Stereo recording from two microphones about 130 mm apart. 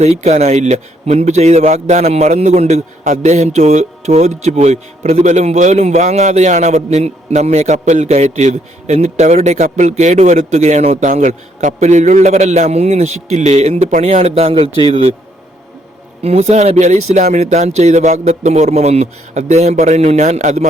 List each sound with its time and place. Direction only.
0.0 s a man's voice: 60° right (ahead or behind)
16.2 s a man's voice: 55° right (ahead or behind)